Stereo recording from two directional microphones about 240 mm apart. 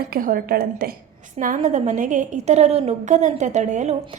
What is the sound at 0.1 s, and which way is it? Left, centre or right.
A woman's voice, right.